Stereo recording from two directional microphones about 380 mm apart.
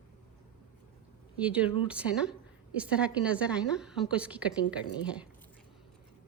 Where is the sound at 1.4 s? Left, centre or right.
Centre.